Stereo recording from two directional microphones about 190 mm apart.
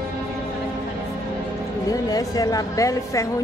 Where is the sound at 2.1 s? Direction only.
20° left (ahead or behind).